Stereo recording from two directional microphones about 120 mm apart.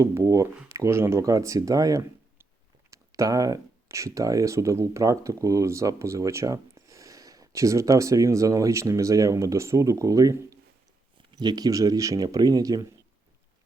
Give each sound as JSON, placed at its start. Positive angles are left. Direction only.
{"t": 0.0, "sound": "speech", "side_deg": -25}